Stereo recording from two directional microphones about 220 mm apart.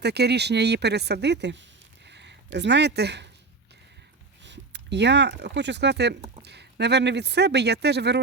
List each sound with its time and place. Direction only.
0.0 s speech: 50° right (ahead or behind)
4.4 s speech: 50° right (ahead or behind)